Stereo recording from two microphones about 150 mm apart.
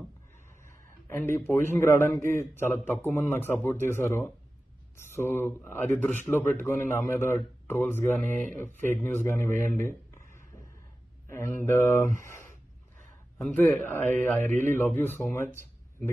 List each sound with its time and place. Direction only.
0.7 s a man's voice: 15° left (ahead or behind)
13.4 s a man's voice: 10° left (ahead or behind)